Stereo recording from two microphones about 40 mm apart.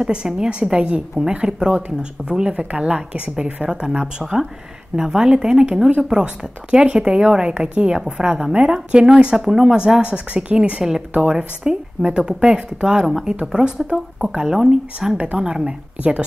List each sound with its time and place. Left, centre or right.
0.0 s a woman's voice: right
1.2 s a woman's voice: centre
3.8 s a woman's voice: centre
9.4 s a woman's voice: centre; by 10.8 s right
10.8 s a woman's voice: centre; by 16.3 s right